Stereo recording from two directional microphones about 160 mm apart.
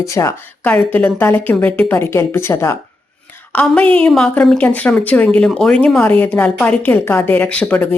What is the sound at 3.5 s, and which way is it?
A woman's voice, 5° left (ahead or behind).